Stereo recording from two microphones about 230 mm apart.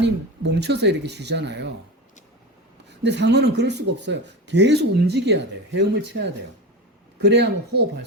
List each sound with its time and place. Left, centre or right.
0.0 s speech: right
3.0 s speech: right